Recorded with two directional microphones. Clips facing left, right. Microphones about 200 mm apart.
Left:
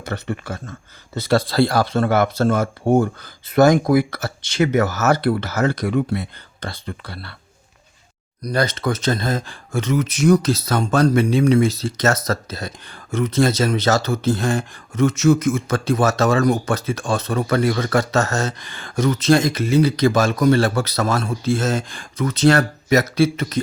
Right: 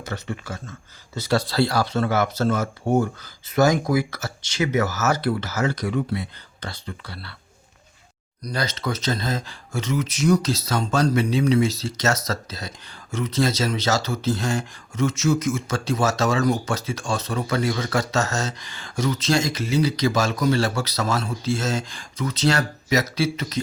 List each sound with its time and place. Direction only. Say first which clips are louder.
0.0 s speech: left 4 dB; 60° left (ahead or behind)
8.4 s speech: left 6 dB; 55° left (ahead or behind)